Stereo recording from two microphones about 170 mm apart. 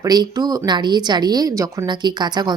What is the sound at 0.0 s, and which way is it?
Speech, 20° right (ahead or behind).